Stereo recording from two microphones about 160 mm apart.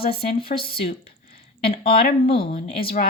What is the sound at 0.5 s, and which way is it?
Speech, 35° left (ahead or behind).